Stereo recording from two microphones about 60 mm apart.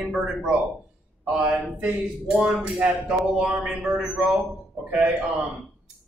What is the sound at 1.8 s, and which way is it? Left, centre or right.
Speech, centre.